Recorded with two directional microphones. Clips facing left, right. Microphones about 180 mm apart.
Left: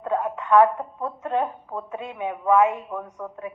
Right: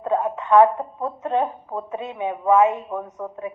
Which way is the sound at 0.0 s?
25° right (ahead or behind).